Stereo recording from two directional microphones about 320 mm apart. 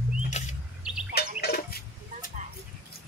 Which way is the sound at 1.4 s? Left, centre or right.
Left.